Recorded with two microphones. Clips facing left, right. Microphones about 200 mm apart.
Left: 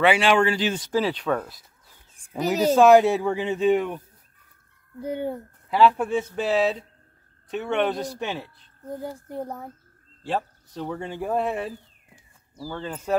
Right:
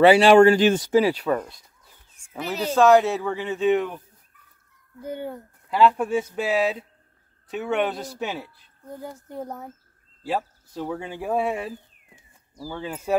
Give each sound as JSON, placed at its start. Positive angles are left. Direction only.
{"t": 0.0, "sound": "speech", "side_deg": -35}
{"t": 0.9, "sound": "speech", "side_deg": -10}
{"t": 2.1, "sound": "a sound", "side_deg": 35}
{"t": 2.6, "sound": "speech", "side_deg": 15}
{"t": 5.0, "sound": "speech", "side_deg": 10}
{"t": 10.2, "sound": "speech", "side_deg": -5}